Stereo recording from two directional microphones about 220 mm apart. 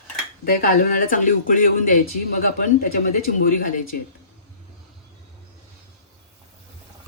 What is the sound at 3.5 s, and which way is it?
Speech, 40° left (ahead or behind).